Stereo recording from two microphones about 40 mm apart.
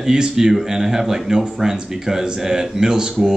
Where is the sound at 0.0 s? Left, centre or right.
Centre.